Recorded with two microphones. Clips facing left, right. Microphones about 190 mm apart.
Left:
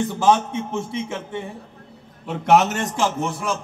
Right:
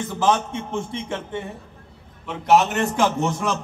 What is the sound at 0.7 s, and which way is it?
Speech, 5° left (ahead or behind).